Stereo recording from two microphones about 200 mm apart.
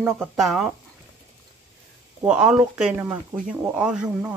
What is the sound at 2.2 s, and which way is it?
Speech, 5° right (ahead or behind).